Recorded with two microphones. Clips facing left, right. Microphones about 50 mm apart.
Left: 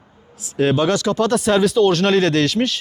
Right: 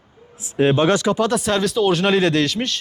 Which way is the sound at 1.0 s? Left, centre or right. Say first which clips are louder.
Even; centre.